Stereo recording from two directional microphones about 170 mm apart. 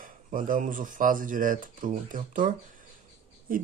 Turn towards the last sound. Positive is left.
turn(degrees=-55)  # may be behind; listen again after turning